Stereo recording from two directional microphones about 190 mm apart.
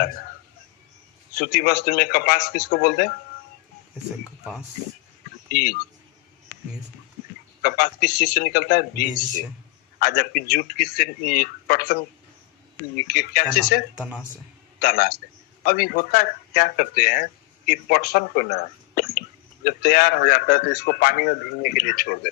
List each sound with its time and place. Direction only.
1.4 s a man's voice: 50° left (ahead or behind)
5.5 s speech: 50° left (ahead or behind)
7.6 s a man's voice: 55° left (ahead or behind)
10.0 s a man's voice: 50° left (ahead or behind)
13.1 s a man's voice: 55° left (ahead or behind)
13.9 s speech: 5° right (ahead or behind)
14.8 s a man's voice: 55° left (ahead or behind)